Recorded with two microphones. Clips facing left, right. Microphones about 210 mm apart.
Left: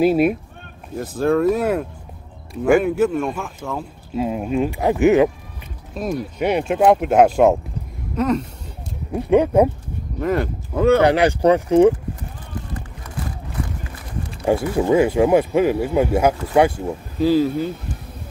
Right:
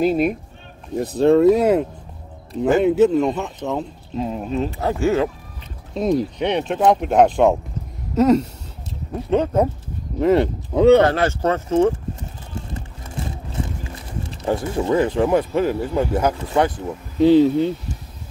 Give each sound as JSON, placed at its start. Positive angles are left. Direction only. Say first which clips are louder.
{"t": 0.0, "sound": "speech", "louder": "left 2 dB", "side_deg": 5}
{"t": 0.9, "sound": "speech", "louder": "right 4 dB", "side_deg": -20}
{"t": 4.1, "sound": "speech", "louder": "left 3 dB", "side_deg": 10}
{"t": 5.9, "sound": "speech", "louder": "right 5 dB", "side_deg": -20}
{"t": 6.3, "sound": "speech", "louder": "left 2 dB", "side_deg": 5}
{"t": 8.2, "sound": "speech", "louder": "right 5 dB", "side_deg": -30}
{"t": 9.1, "sound": "speech", "louder": "left 4 dB", "side_deg": 10}
{"t": 10.2, "sound": "speech", "louder": "right 5 dB", "side_deg": -25}
{"t": 11.0, "sound": "speech", "louder": "left 2 dB", "side_deg": 15}
{"t": 12.5, "sound": "run", "louder": "left 1 dB", "side_deg": -25}
{"t": 14.3, "sound": "speech", "louder": "left 3 dB", "side_deg": 10}
{"t": 17.2, "sound": "speech", "louder": "right 4 dB", "side_deg": -25}